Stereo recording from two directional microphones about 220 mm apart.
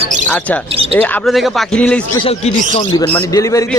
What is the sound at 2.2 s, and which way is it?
Speech, 25° left (ahead or behind).